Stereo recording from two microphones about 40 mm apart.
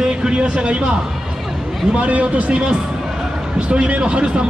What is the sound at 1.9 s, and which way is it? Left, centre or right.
A man's voice, right.